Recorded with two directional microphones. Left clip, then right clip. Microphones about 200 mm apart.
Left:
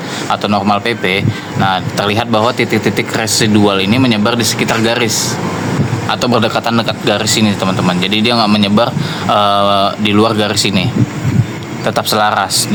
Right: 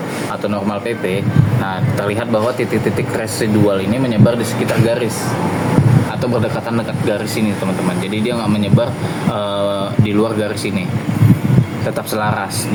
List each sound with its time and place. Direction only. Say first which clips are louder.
0.4 s a man's voice: left 7 dB; 50° left (ahead or behind)
6.3 s a man's voice: left 7 dB; 50° left (ahead or behind)
11.9 s a man's voice: left 8 dB; 50° left (ahead or behind)